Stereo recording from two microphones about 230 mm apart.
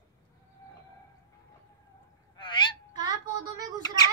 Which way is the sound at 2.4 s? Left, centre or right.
Left.